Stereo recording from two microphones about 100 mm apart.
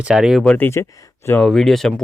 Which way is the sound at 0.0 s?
5° right (ahead or behind).